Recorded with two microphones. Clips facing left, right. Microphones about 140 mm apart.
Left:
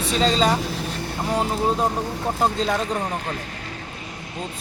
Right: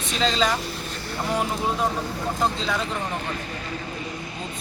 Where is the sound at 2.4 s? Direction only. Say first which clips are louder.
Left 4 dB; 45° left (ahead or behind).